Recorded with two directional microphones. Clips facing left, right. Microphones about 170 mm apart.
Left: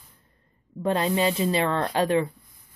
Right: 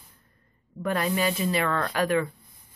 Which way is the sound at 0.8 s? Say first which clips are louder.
Left 3 dB; 25° left (ahead or behind).